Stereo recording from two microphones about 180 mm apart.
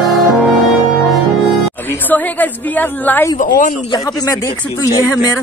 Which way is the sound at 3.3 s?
45° left (ahead or behind).